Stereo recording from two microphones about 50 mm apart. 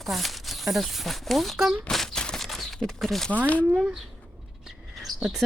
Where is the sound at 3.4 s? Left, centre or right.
Left.